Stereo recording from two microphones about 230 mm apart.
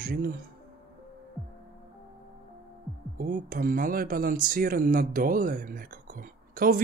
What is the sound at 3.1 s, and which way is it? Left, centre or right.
Speech, right.